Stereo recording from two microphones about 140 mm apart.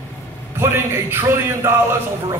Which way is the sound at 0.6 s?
15° right (ahead or behind).